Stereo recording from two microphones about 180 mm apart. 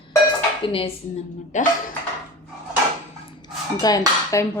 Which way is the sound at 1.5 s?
40° left (ahead or behind).